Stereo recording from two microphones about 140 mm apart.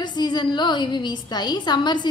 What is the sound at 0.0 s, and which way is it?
A woman's voice, 30° left (ahead or behind).